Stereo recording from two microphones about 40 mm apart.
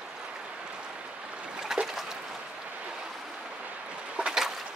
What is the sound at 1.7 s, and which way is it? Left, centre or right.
Trickle, centre.